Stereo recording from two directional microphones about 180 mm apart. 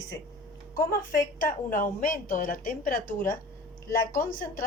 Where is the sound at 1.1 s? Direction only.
50° left (ahead or behind).